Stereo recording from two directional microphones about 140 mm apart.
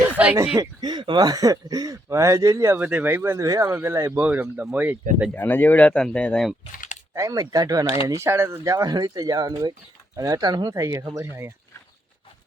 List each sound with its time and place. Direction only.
0.3 s speech: 20° right (ahead or behind)
0.8 s speech: 30° right (ahead or behind); by 4.9 s 10° right (ahead or behind)
5.3 s speech: 15° left (ahead or behind)
7.1 s speech: 25° right (ahead or behind)